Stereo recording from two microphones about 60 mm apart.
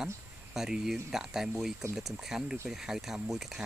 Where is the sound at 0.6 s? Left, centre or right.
Centre.